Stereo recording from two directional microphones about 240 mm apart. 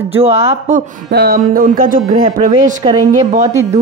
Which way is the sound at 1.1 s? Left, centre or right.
Right.